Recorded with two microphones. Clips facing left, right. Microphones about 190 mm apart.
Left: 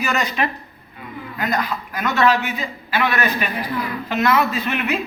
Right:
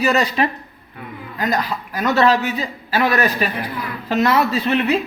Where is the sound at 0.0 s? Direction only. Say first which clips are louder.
Right 5 dB; 35° right (ahead or behind).